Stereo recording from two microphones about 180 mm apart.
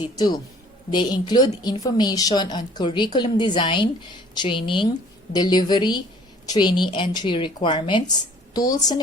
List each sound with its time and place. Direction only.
0.2 s a woman's voice: 20° left (ahead or behind)